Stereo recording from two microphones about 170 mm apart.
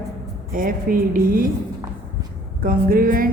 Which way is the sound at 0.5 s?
55° right (ahead or behind).